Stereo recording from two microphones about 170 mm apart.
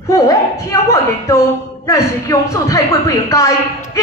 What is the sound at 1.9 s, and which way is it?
A man's voice, 20° left (ahead or behind).